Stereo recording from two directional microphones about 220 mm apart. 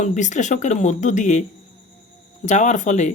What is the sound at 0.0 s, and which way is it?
Speech, 35° left (ahead or behind).